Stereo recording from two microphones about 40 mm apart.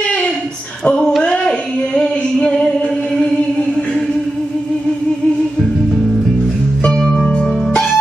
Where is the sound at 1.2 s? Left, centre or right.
Left.